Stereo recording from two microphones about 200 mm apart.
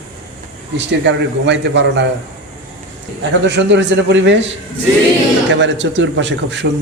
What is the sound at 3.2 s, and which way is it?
A man's voice, 60° right (ahead or behind).